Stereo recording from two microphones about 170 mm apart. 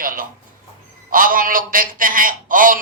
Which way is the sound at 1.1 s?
55° right (ahead or behind).